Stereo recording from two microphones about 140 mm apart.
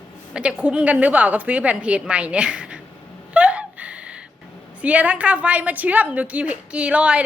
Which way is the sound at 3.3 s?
10° right (ahead or behind).